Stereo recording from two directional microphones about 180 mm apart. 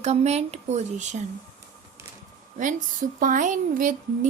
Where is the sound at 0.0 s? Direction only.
35° right (ahead or behind).